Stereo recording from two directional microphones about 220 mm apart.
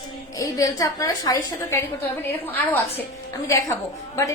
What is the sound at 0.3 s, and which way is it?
A woman's voice, 15° left (ahead or behind).